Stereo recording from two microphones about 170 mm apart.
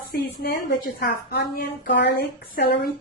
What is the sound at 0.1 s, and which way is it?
A woman's voice, 65° left (ahead or behind).